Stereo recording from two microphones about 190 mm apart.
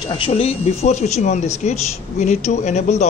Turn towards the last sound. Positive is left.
turn(degrees=35)  # may be behind; listen again after turning